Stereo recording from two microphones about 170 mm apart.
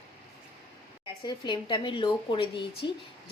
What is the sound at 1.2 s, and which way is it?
A woman's voice, 25° left (ahead or behind).